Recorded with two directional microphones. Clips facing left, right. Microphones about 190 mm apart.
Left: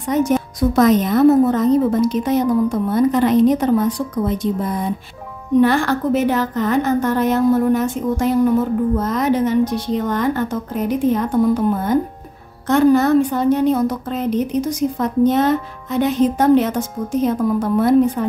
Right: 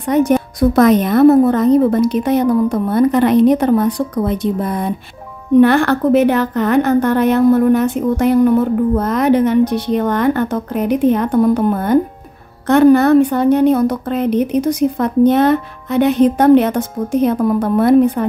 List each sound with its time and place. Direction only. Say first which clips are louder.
0.1 s a woman's voice: right 4 dB; 60° right (ahead or behind)